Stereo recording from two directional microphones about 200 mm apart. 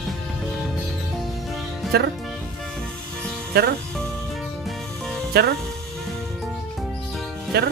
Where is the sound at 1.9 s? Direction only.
50° right (ahead or behind).